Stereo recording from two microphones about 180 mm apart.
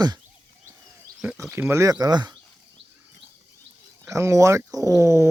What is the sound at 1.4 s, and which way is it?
Speech, 10° right (ahead or behind).